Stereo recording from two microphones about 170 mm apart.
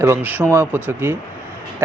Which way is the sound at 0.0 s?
15° right (ahead or behind).